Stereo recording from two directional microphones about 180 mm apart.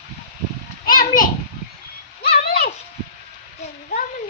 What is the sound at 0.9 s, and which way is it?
Children playing, 50° left (ahead or behind).